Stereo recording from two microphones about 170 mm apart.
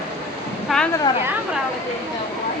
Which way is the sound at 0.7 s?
Centre (ahead or behind).